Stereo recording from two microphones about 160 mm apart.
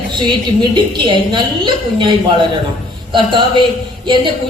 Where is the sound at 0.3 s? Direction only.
30° right (ahead or behind).